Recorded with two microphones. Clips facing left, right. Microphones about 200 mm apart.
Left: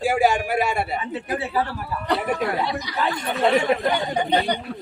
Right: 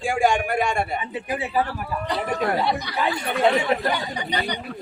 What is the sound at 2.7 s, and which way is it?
Speech, 60° right (ahead or behind).